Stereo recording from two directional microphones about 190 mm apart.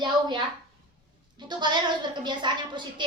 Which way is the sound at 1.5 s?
25° right (ahead or behind).